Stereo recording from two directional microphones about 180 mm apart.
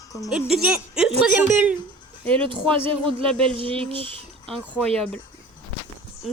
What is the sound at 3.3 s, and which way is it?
Speech, 5° left (ahead or behind).